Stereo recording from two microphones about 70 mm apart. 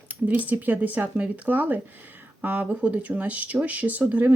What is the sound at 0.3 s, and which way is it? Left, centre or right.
Speech, right.